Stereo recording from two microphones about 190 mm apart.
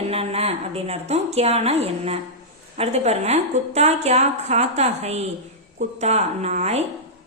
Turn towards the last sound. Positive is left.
turn(degrees=-35)  # may be behind; listen again after turning